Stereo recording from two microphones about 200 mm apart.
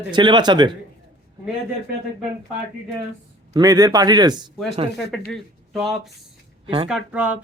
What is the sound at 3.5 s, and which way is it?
Speech, 20° right (ahead or behind).